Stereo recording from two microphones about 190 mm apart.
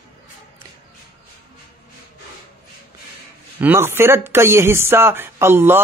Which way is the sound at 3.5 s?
10° right (ahead or behind).